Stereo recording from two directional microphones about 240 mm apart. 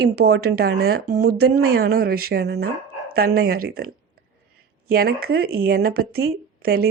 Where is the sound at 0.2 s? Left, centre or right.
Right.